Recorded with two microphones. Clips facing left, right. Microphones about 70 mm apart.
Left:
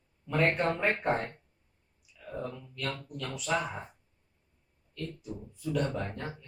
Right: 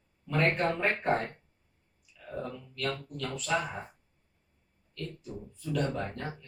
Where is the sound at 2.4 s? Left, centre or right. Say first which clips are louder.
Right 3 dB; centre.